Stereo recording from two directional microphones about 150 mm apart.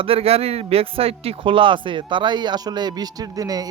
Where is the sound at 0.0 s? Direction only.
40° right (ahead or behind).